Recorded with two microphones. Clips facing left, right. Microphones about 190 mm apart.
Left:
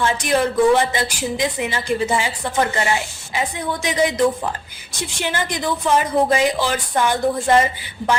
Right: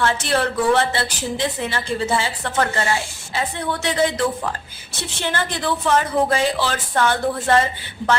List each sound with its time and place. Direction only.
0.0 s a woman's voice: 15° left (ahead or behind)